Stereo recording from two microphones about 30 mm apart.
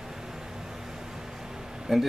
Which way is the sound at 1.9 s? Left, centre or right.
Centre.